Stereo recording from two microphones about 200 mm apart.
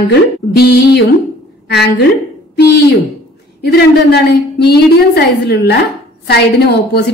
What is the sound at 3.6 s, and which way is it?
A woman's voice, 55° left (ahead or behind).